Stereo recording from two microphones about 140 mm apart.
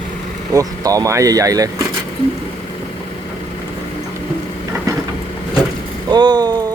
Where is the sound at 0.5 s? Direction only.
25° right (ahead or behind).